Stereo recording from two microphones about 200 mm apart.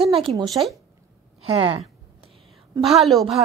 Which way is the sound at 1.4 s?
30° right (ahead or behind).